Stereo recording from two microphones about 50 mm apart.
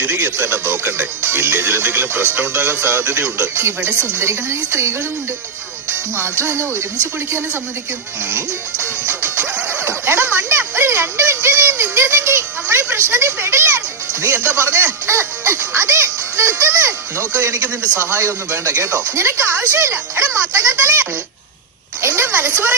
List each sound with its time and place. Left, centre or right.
0.0 s speech: right
6.1 s speech: right
8.3 s music: right
12.7 s a sound: right
14.5 s speech: right
15.0 s music: right
17.8 s speech: left
18.2 s speech: right
22.0 s a sound: right
22.3 s speech: right